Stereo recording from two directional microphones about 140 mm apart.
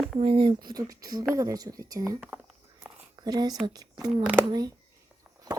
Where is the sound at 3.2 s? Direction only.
30° right (ahead or behind).